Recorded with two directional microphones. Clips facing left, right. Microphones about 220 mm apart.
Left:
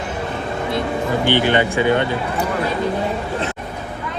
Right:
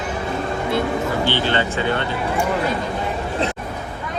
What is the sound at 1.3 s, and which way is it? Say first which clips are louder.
Speech: left 4 dB; 15° left (ahead or behind).